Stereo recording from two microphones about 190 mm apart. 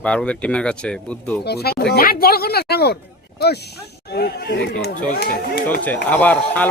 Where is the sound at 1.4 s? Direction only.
55° left (ahead or behind).